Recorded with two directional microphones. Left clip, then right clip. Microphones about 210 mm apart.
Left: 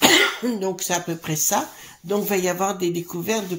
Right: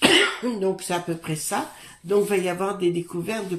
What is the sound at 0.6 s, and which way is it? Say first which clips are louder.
Speech: right 1 dB; 35° left (ahead or behind).